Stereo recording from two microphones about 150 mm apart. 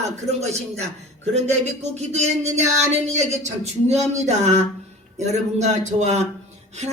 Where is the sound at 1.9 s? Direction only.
50° right (ahead or behind).